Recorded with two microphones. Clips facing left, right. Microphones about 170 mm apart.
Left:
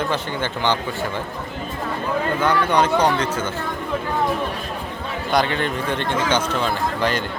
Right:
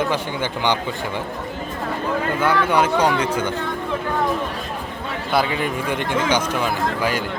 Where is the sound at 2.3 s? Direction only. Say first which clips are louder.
Even; 10° right (ahead or behind).